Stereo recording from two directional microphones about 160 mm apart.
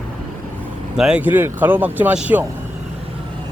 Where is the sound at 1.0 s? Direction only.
5° right (ahead or behind).